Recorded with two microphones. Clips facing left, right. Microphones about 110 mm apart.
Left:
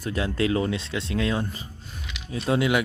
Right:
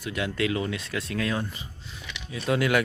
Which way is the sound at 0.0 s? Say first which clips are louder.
Left 3 dB; 35° left (ahead or behind).